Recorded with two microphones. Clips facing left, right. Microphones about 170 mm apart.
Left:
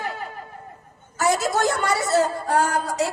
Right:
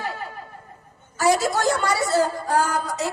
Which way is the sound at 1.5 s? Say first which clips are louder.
Even; 50° left (ahead or behind).